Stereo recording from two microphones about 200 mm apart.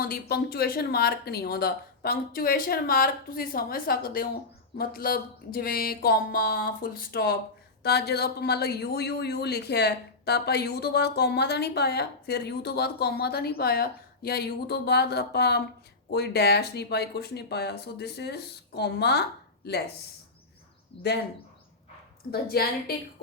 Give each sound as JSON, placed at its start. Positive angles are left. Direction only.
{"t": 0.0, "sound": "speech", "side_deg": 50}
{"t": 20.9, "sound": "speech", "side_deg": 25}
{"t": 22.3, "sound": "speech", "side_deg": 50}